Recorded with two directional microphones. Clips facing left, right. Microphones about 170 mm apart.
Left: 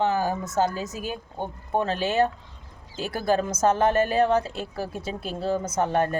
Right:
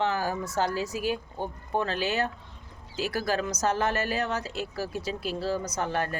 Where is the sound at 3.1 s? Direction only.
25° left (ahead or behind).